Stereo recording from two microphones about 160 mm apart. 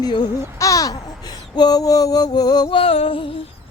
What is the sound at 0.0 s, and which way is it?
Speech, 25° left (ahead or behind).